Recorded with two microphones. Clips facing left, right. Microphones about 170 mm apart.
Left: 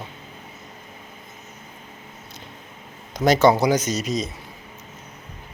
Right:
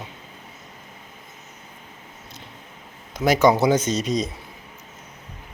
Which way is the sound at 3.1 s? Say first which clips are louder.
Left 2 dB; 5° right (ahead or behind).